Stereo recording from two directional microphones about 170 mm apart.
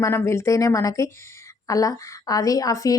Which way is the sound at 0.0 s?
15° left (ahead or behind).